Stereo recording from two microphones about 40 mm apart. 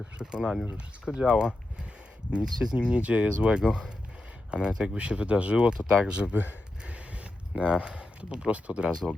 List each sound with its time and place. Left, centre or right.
0.2 s speech: centre
6.3 s speech: right
6.8 s a sound: right
7.5 s speech: right